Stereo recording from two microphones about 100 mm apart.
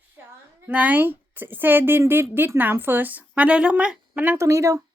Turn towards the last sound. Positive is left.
turn(degrees=-30)  # may be behind; listen again after turning